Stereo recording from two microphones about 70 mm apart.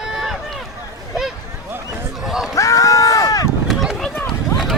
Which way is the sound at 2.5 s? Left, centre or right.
Left.